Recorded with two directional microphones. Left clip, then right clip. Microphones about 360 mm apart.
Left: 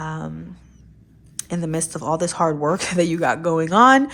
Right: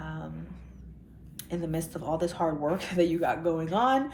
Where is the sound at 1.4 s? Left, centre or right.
Centre.